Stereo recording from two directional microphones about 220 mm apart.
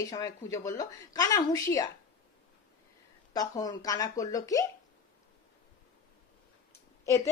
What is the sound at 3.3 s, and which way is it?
Speech, 15° left (ahead or behind).